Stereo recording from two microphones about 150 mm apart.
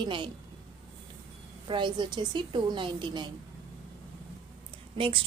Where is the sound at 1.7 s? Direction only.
30° right (ahead or behind).